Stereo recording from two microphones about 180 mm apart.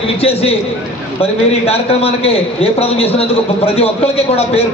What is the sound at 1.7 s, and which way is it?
A man's voice, 35° left (ahead or behind).